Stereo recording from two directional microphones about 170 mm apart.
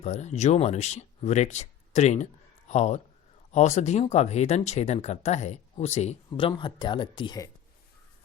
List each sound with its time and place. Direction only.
0.0 s speech: 40° left (ahead or behind); by 7.5 s 25° left (ahead or behind)